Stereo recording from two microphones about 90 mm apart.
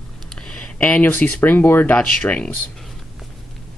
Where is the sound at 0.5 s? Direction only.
15° left (ahead or behind).